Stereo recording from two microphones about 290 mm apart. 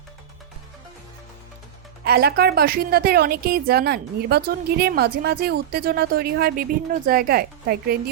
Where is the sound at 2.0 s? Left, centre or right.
Right.